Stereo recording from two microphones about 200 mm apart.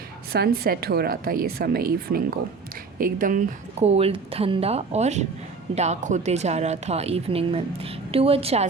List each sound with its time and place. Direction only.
0.3 s a woman's voice: 50° right (ahead or behind); by 8.6 s 30° right (ahead or behind)